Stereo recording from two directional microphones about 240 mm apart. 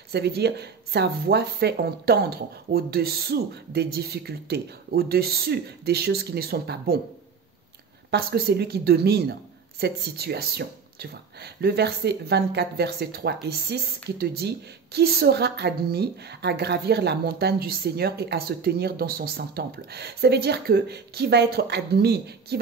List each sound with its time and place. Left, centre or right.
0.1 s speech: right
8.1 s speech: right